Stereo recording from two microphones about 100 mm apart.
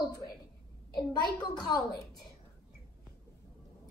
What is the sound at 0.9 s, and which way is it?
A woman's voice, 45° left (ahead or behind).